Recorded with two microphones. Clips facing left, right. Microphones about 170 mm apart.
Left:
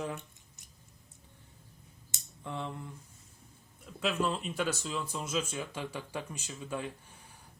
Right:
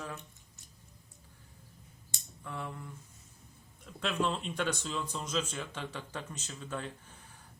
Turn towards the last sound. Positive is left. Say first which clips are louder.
# left 2 dB
turn(degrees=10)  # may be behind; listen again after turning